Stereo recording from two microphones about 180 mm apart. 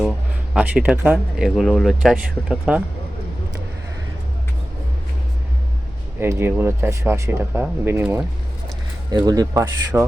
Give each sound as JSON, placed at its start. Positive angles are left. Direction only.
{"t": 0.5, "sound": "speech", "side_deg": -10}
{"t": 6.1, "sound": "speech", "side_deg": -15}